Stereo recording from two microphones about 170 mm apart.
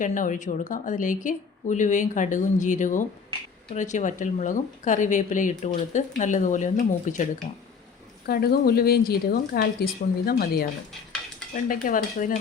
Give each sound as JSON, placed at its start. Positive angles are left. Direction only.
{"t": 0.0, "sound": "speech", "side_deg": 50}
{"t": 8.3, "sound": "a woman's voice", "side_deg": 65}
{"t": 11.5, "sound": "speech", "side_deg": 50}